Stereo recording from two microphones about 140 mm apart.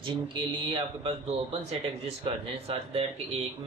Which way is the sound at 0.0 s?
35° right (ahead or behind).